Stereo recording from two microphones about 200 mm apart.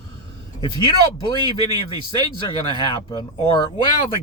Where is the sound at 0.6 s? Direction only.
20° left (ahead or behind).